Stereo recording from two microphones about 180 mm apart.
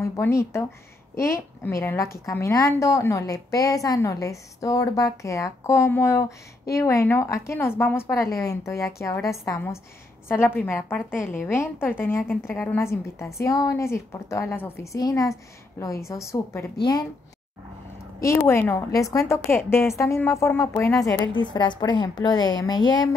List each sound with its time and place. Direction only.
0.0 s a woman's voice: 15° left (ahead or behind)
18.2 s a woman's voice: 15° left (ahead or behind)